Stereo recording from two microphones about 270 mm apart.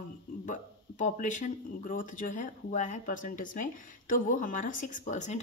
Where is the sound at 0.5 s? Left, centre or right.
Left.